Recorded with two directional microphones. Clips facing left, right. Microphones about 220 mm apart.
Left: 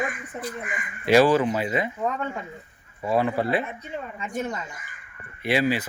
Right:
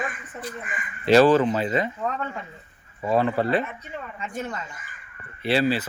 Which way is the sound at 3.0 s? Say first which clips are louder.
Right 1 dB; 10° left (ahead or behind).